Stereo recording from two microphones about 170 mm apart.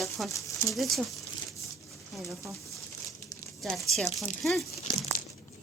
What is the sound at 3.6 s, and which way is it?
Speech, centre (ahead or behind).